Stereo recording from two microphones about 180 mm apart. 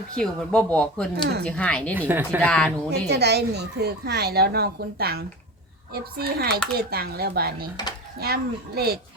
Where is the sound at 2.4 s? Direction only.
5° left (ahead or behind).